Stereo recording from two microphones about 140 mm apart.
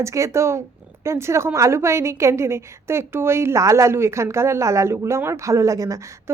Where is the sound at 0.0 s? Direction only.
20° right (ahead or behind).